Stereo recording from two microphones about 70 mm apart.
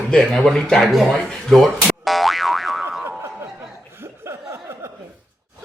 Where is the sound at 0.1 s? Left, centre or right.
Centre.